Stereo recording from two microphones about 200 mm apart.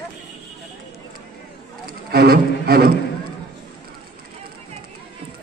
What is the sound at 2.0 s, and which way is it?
Double bass, 50° right (ahead or behind).